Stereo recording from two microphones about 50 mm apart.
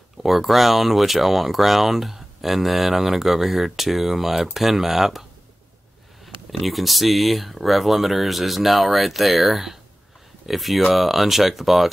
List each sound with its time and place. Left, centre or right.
0.2 s speech: centre
6.2 s speech: centre